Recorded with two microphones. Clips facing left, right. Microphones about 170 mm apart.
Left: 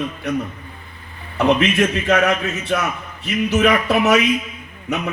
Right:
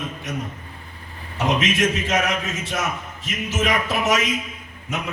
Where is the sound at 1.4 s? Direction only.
60° left (ahead or behind).